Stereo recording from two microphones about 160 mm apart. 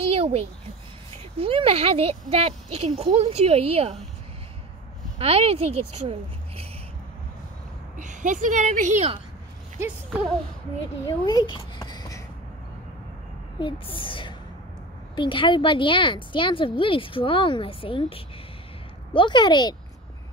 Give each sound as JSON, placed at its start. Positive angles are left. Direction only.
{"t": 0.0, "sound": "a sound", "side_deg": -35}
{"t": 1.4, "sound": "speech", "side_deg": -35}
{"t": 5.2, "sound": "speech", "side_deg": -40}
{"t": 8.0, "sound": "speech", "side_deg": -50}
{"t": 11.1, "sound": "a child's voice", "side_deg": 25}
{"t": 13.6, "sound": "a woman's voice", "side_deg": 30}